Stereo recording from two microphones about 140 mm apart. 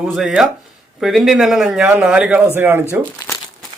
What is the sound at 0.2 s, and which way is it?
Speech, 5° right (ahead or behind).